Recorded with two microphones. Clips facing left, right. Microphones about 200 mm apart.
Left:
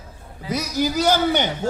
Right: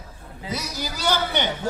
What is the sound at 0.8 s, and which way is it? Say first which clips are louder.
Speech: left 7 dB; 45° left (ahead or behind).